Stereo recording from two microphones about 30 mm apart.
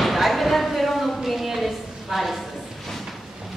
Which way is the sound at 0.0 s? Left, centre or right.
Centre.